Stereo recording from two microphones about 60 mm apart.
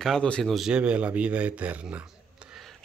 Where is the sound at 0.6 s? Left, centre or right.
Centre.